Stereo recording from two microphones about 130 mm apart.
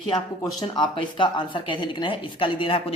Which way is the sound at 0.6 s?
35° left (ahead or behind).